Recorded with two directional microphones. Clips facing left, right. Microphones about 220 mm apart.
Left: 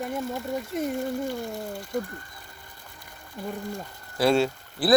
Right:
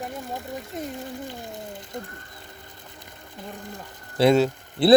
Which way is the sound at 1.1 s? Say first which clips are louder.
Left 6 dB; 20° right (ahead or behind).